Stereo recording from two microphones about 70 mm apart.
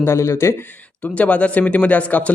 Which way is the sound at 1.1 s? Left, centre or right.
Centre.